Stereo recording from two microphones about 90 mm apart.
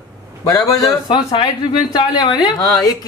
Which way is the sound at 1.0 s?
60° left (ahead or behind).